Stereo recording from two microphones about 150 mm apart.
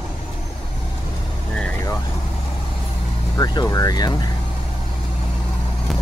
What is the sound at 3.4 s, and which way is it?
Speech, 25° left (ahead or behind).